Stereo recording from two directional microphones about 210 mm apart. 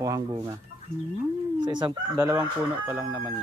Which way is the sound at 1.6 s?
20° right (ahead or behind).